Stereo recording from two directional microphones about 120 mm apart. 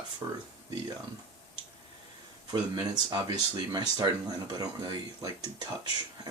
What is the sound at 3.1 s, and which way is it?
Speech, 35° right (ahead or behind).